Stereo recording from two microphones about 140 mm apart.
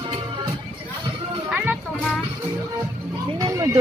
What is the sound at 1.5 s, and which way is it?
Music, 10° right (ahead or behind).